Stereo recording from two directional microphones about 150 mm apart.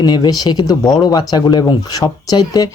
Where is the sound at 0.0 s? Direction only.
30° left (ahead or behind).